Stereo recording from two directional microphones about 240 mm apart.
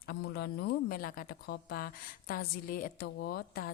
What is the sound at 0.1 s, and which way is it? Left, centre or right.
Speech, left.